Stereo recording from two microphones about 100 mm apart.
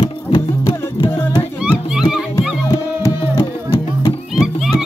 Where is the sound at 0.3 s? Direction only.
45° left (ahead or behind).